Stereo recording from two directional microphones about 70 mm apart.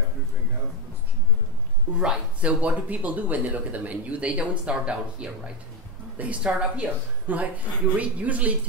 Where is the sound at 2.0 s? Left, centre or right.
Centre.